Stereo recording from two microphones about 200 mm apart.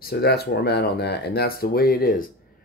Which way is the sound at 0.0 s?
55° left (ahead or behind).